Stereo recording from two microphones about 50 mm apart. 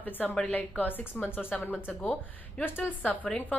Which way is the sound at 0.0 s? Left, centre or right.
Left.